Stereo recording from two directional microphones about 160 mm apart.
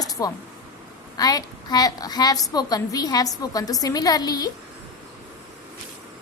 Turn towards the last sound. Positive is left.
turn(degrees=25)  # may be behind; listen again after turning